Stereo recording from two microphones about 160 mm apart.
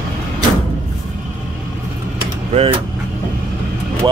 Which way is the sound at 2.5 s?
35° right (ahead or behind).